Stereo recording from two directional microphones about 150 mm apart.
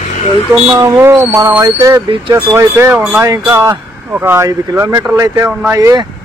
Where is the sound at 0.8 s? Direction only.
20° right (ahead or behind).